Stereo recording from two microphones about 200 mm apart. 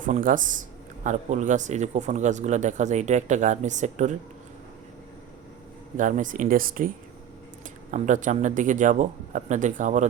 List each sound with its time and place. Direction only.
0.0 s a man's voice: 40° right (ahead or behind)
6.0 s a man's voice: 40° right (ahead or behind)